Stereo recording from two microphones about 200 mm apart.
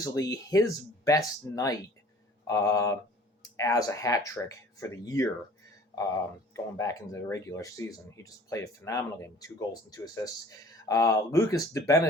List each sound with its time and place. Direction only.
0.0 s speech: 15° left (ahead or behind)